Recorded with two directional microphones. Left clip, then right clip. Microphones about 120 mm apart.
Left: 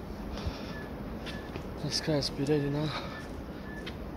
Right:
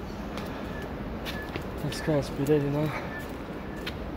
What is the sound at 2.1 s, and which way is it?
Speech, 40° left (ahead or behind).